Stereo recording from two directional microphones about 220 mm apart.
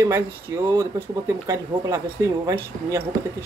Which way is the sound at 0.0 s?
15° right (ahead or behind).